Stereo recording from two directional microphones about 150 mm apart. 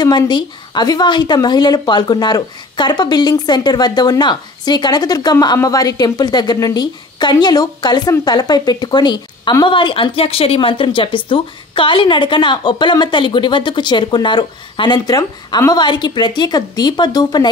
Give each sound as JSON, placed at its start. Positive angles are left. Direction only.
{"t": 0.0, "sound": "speech", "side_deg": 30}